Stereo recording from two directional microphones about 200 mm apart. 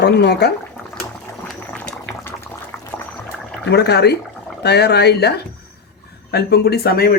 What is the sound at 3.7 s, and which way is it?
Speech, 55° left (ahead or behind).